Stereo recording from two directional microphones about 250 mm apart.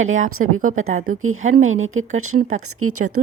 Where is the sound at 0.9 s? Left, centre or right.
Right.